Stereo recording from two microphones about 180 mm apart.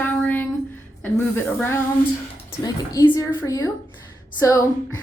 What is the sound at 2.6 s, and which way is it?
A woman's voice, 20° left (ahead or behind).